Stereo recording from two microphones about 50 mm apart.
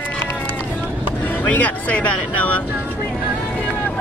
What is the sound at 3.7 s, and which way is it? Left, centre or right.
Vehicle, left.